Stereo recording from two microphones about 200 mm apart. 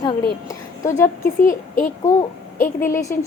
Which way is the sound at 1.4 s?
40° left (ahead or behind).